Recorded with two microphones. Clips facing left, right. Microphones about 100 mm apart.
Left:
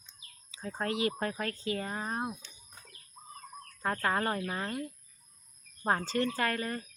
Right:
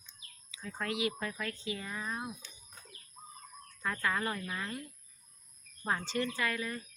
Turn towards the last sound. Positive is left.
turn(degrees=45)  # may be behind; listen again after turning